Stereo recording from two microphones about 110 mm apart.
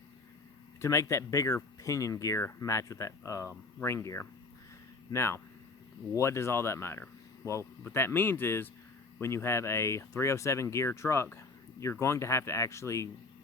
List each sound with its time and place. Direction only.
0.8 s speech: 25° left (ahead or behind)